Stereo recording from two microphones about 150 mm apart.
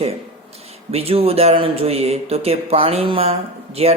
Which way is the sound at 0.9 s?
40° right (ahead or behind).